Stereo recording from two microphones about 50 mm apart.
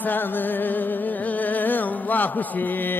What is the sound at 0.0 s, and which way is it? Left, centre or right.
Music, left.